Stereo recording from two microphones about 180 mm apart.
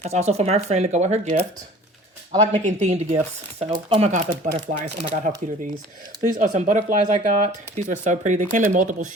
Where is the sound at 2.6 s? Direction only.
40° right (ahead or behind).